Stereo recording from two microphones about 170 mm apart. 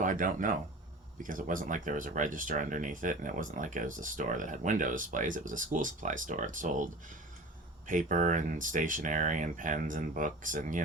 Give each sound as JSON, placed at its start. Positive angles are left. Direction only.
{"t": 0.0, "sound": "speech", "side_deg": -50}
{"t": 7.9, "sound": "speech", "side_deg": -50}